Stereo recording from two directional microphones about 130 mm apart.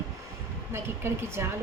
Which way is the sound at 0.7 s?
20° right (ahead or behind).